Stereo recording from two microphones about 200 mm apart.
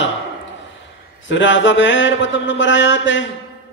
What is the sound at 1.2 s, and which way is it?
A man's voice, 65° left (ahead or behind).